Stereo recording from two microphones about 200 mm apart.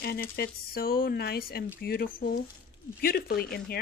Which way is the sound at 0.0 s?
50° left (ahead or behind).